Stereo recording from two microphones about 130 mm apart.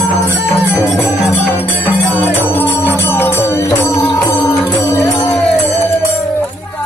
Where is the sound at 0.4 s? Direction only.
Centre (ahead or behind).